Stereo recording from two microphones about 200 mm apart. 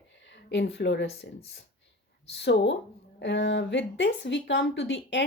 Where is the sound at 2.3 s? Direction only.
60° left (ahead or behind).